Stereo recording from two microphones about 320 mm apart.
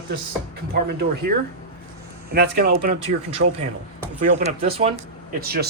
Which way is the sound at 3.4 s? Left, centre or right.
Right.